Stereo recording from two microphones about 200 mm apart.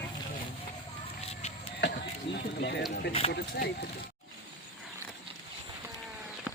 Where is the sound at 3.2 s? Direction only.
30° left (ahead or behind).